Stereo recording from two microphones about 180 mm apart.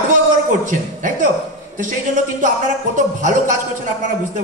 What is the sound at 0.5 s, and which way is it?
Speech, 45° right (ahead or behind).